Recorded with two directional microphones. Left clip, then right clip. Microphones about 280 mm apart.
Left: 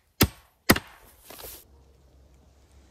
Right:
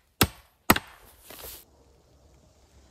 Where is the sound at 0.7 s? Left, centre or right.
Centre.